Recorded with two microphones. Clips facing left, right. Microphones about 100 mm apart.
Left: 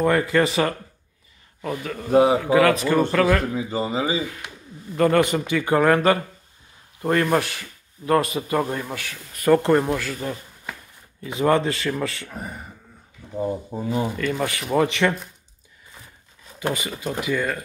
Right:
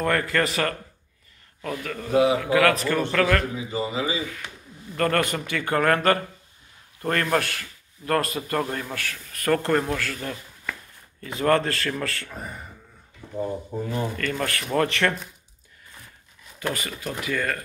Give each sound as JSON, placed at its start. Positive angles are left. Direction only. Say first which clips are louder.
{"t": 0.0, "sound": "speech", "louder": "left 4 dB", "side_deg": 15}
{"t": 3.7, "sound": "speech", "louder": "left 2 dB", "side_deg": 30}
{"t": 4.9, "sound": "speech", "louder": "left 5 dB", "side_deg": 10}
{"t": 17.0, "sound": "speech", "louder": "left 3 dB", "side_deg": 20}